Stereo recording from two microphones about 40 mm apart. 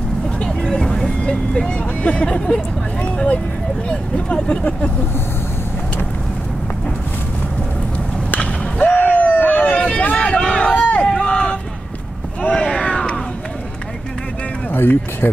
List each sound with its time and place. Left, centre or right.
0.4 s vehicle: left
2.2 s speech: left
8.4 s skateboard: left
9.3 s a sound: left
11.1 s a sound: centre
14.7 s speech: left